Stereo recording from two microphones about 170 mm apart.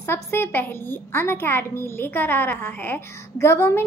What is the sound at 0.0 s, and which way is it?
A woman's voice, 15° left (ahead or behind).